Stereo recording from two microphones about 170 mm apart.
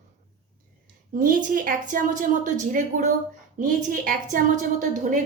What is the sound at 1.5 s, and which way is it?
A woman's voice, 50° right (ahead or behind).